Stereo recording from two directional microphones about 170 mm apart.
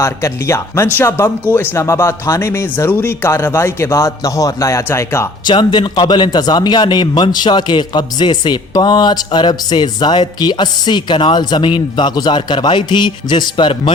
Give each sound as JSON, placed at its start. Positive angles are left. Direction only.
{"t": 0.0, "sound": "speech", "side_deg": 15}
{"t": 5.5, "sound": "a man's voice", "side_deg": 25}